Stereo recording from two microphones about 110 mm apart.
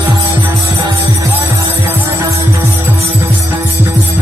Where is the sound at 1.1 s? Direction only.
25° right (ahead or behind).